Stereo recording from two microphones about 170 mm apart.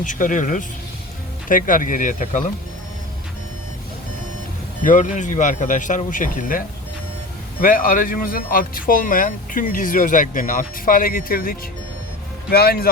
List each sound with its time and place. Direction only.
0.0 s speech: 50° left (ahead or behind)
4.8 s speech: 45° left (ahead or behind); by 12.9 s 65° left (ahead or behind)